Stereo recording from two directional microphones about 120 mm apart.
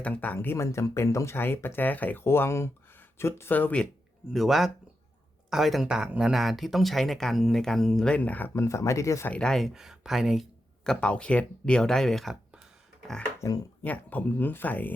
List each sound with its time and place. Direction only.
0.0 s speech: 15° left (ahead or behind)
4.3 s speech: centre (ahead or behind); by 9.3 s 25° left (ahead or behind)
9.3 s speech: 5° left (ahead or behind)
10.8 s speech: 10° left (ahead or behind)
13.8 s speech: 15° left (ahead or behind)